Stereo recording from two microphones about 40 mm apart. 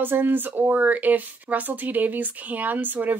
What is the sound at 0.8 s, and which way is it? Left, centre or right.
A woman's voice, right.